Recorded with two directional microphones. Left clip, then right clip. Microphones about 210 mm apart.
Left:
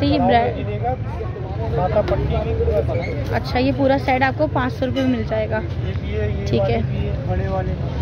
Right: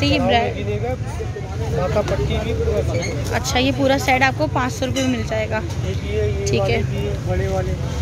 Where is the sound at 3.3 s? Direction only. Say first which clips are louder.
Right 1 dB; centre (ahead or behind).